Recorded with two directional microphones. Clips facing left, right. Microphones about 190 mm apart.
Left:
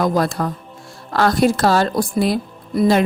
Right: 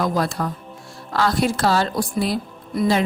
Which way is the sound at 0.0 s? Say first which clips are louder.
Left 4 dB; 45° left (ahead or behind).